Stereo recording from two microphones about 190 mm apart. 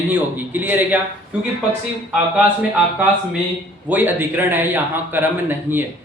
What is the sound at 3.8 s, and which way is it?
Speech, 10° right (ahead or behind).